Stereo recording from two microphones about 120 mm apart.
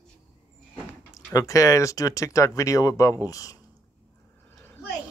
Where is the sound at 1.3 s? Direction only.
25° left (ahead or behind).